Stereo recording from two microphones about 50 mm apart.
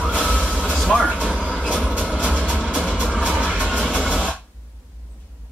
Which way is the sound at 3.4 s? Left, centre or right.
Right.